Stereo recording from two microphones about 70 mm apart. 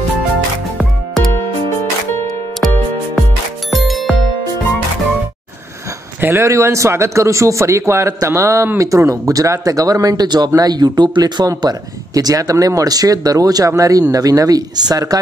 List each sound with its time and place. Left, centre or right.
3.7 s music: centre
6.2 s a man's voice: right